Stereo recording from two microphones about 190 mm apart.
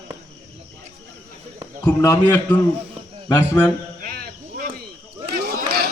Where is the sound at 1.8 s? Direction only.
15° left (ahead or behind).